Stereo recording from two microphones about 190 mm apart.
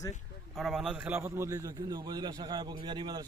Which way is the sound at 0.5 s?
Centre (ahead or behind).